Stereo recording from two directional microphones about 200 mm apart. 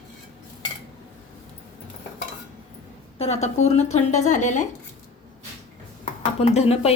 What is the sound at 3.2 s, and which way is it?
A woman's voice, 35° left (ahead or behind).